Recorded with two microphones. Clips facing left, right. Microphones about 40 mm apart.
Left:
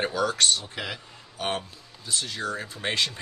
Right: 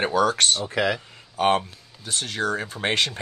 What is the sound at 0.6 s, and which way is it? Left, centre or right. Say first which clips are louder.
Speech: right 11 dB; right.